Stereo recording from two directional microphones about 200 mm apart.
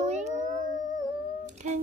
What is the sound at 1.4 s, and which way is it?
Humming, 40° right (ahead or behind).